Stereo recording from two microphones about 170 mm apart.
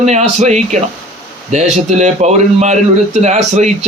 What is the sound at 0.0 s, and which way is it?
Speech, 40° right (ahead or behind).